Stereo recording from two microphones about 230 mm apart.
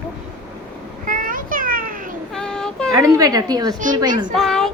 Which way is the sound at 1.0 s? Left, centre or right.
Right.